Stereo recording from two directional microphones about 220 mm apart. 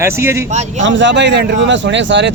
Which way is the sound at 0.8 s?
55° right (ahead or behind).